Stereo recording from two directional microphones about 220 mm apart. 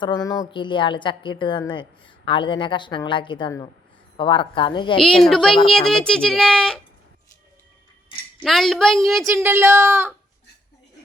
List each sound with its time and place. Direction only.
0.0 s a woman's voice: 15° left (ahead or behind)
4.9 s speech: centre (ahead or behind)
8.4 s speech: centre (ahead or behind)
9.2 s a woman's voice: 10° right (ahead or behind)